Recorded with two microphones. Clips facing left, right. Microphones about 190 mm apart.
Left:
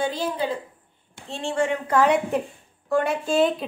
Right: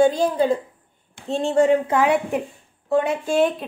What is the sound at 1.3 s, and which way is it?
Speech, 40° right (ahead or behind).